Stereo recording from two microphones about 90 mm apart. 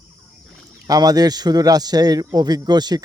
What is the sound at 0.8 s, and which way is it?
A man's voice, 45° right (ahead or behind).